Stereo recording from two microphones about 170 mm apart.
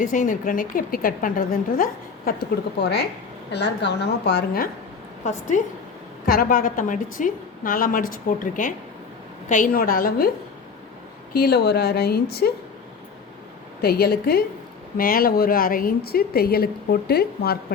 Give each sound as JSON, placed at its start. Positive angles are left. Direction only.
{"t": 0.0, "sound": "a woman's voice", "side_deg": 50}
{"t": 5.2, "sound": "a woman's voice", "side_deg": 45}
{"t": 6.2, "sound": "a woman's voice", "side_deg": 60}
{"t": 11.3, "sound": "a woman's voice", "side_deg": 70}
{"t": 13.8, "sound": "a woman's voice", "side_deg": 65}